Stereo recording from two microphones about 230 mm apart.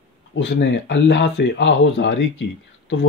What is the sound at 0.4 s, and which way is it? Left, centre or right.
Speech, left.